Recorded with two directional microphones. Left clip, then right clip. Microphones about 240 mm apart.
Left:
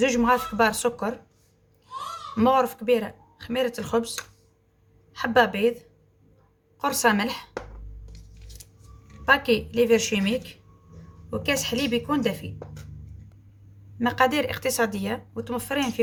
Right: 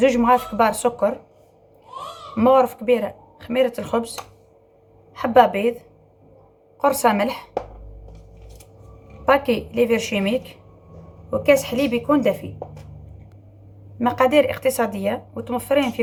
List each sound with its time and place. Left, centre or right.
0.0 s speech: left
2.3 s speech: left
5.1 s speech: left
6.7 s speech: left
9.2 s speech: left
14.0 s speech: left